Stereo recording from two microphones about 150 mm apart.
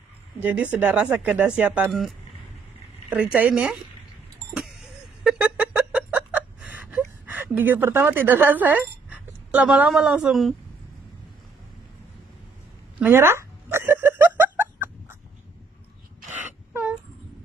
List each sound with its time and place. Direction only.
0.4 s speech: 10° right (ahead or behind)
5.4 s fowl: 5° right (ahead or behind)
6.9 s a woman's voice: 10° right (ahead or behind)
13.0 s a sound: 15° right (ahead or behind)